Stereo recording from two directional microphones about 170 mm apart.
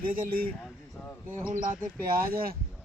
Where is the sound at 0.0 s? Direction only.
55° right (ahead or behind).